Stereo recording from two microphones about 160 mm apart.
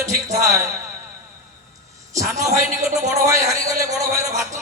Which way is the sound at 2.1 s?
20° right (ahead or behind).